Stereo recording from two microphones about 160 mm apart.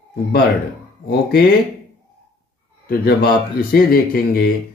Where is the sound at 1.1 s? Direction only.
70° left (ahead or behind).